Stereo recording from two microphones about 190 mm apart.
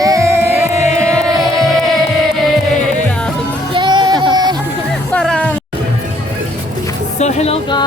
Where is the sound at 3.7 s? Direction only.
25° right (ahead or behind).